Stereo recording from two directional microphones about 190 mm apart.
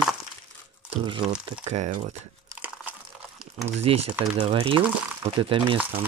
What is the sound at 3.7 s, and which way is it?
Speech, 35° right (ahead or behind).